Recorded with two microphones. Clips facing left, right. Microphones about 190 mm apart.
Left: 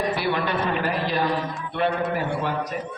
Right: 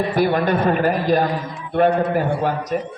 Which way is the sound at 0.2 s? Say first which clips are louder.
Right 7 dB; 45° right (ahead or behind).